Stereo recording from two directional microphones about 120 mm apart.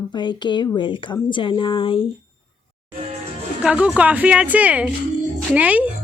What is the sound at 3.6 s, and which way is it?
A woman's voice, 10° right (ahead or behind).